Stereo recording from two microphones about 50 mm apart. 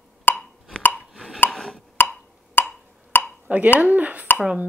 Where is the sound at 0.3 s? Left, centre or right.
Left.